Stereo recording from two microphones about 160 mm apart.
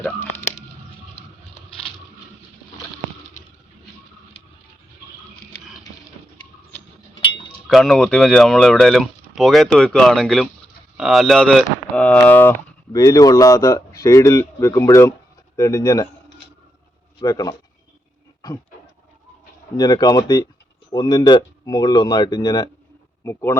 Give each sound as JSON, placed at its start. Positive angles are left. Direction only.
{"t": 0.0, "sound": "a sound", "side_deg": 10}
{"t": 7.7, "sound": "speech", "side_deg": 0}
{"t": 17.2, "sound": "speech", "side_deg": 25}
{"t": 19.7, "sound": "speech", "side_deg": 25}